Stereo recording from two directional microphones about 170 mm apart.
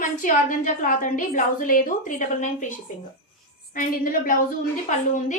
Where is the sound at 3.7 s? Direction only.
55° left (ahead or behind).